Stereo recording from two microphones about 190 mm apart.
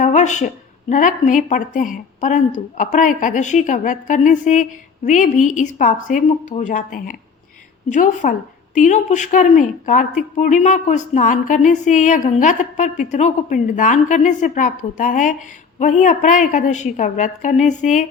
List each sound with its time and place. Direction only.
0.0 s a woman's voice: 40° left (ahead or behind)